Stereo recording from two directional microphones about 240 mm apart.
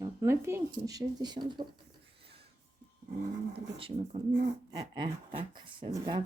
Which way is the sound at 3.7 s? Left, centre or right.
Right.